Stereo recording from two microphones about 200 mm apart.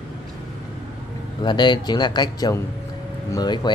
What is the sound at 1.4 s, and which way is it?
Speech, 20° left (ahead or behind).